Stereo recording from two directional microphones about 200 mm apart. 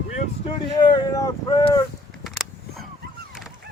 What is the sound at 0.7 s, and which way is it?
Speech, 20° left (ahead or behind).